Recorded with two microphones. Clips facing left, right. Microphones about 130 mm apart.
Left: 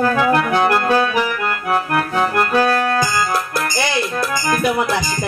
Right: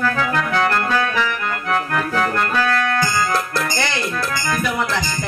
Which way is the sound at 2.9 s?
15° left (ahead or behind).